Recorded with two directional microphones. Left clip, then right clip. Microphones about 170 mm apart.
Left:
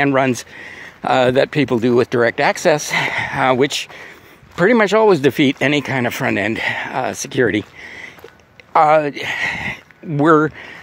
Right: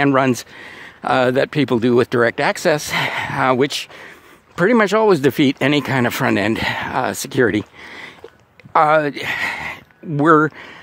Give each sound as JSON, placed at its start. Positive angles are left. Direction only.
{"t": 0.0, "sound": "speech", "side_deg": -35}